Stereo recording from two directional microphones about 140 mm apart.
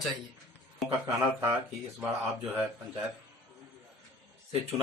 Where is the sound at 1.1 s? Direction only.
20° right (ahead or behind).